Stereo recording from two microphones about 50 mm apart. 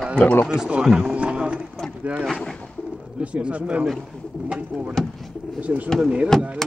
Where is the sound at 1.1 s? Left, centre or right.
Right.